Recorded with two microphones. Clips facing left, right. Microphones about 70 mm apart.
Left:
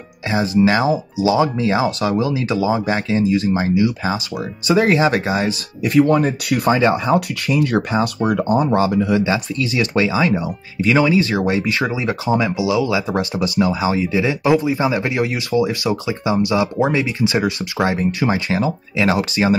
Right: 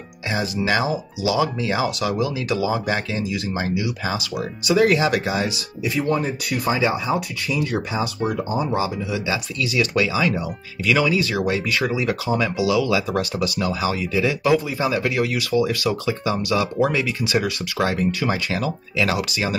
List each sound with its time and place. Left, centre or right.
0.3 s speech: left
5.8 s speech: left
9.2 s speech: left